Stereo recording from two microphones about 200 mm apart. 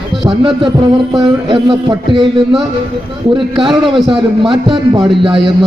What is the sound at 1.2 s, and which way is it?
A man's voice, 25° right (ahead or behind).